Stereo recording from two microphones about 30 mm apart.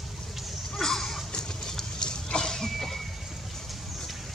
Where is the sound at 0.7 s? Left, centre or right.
Centre.